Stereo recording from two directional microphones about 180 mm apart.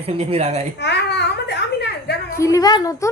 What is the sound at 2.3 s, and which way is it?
Speech, 15° left (ahead or behind).